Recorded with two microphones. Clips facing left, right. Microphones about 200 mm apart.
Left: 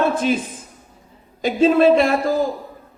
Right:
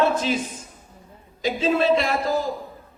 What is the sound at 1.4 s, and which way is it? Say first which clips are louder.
A woman's voice: left 7 dB; 50° left (ahead or behind).